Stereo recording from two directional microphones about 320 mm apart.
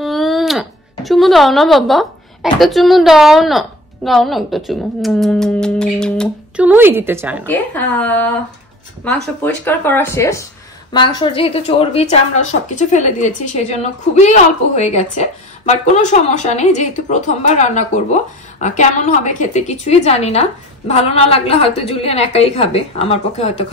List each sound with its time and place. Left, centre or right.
0.0 s speech: centre
7.4 s a woman's voice: centre